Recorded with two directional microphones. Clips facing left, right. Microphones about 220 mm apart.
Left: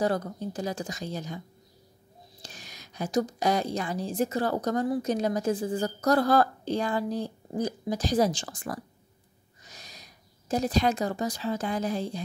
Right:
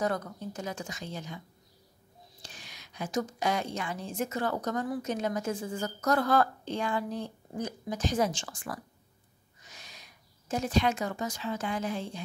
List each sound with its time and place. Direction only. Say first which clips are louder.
0.0 s a woman's voice: left 4 dB; 30° left (ahead or behind)
2.4 s a woman's voice: left 4 dB; 40° left (ahead or behind)